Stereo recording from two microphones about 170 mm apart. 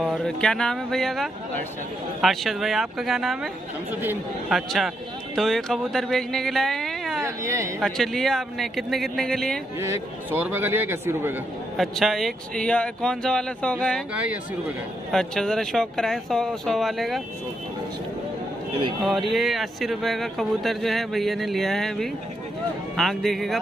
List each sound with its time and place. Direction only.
0.0 s speech: 5° left (ahead or behind)
4.5 s speech: centre (ahead or behind)
7.2 s speech: 15° right (ahead or behind)
7.8 s speech: centre (ahead or behind)
9.8 s a man's voice: 10° right (ahead or behind)
11.7 s speech: centre (ahead or behind)
14.1 s a man's voice: 10° right (ahead or behind)
15.0 s speech: centre (ahead or behind)
19.0 s speech: centre (ahead or behind)